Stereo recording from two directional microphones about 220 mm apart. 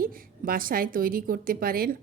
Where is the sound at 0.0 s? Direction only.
40° right (ahead or behind).